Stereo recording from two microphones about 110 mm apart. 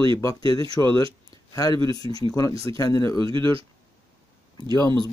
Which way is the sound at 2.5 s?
60° right (ahead or behind).